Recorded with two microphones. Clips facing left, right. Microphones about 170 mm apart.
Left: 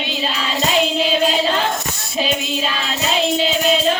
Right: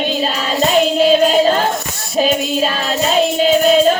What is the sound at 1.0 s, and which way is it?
Singing, 45° right (ahead or behind).